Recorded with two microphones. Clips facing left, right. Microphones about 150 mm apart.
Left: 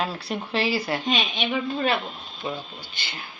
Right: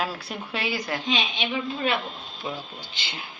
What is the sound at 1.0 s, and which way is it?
Speech, 50° left (ahead or behind).